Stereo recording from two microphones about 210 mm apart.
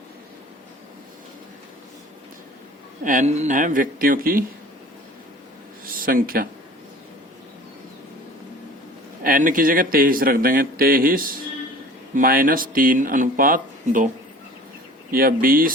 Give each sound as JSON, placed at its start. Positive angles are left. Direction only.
{"t": 3.0, "sound": "speech", "side_deg": -40}
{"t": 5.8, "sound": "a sound", "side_deg": -45}
{"t": 9.2, "sound": "speech", "side_deg": -40}
{"t": 15.1, "sound": "speech", "side_deg": -45}